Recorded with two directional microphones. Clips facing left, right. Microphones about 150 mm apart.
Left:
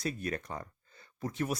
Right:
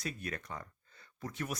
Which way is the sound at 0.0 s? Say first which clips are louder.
Left 6 dB; 35° left (ahead or behind).